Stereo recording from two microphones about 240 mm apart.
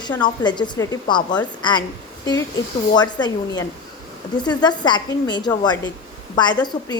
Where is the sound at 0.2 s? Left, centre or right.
Centre.